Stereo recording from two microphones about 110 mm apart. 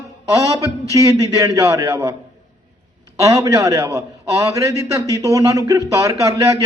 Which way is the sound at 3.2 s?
30° right (ahead or behind).